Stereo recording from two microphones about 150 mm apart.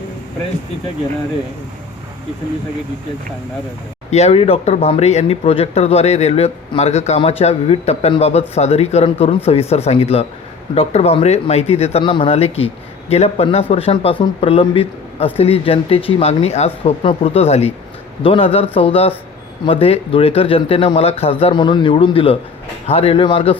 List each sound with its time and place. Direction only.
4.1 s speech: 45° left (ahead or behind)